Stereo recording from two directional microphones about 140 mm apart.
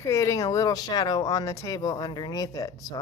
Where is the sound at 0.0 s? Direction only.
20° left (ahead or behind).